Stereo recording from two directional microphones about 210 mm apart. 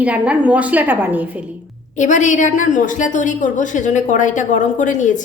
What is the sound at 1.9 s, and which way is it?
A woman's voice, 35° left (ahead or behind).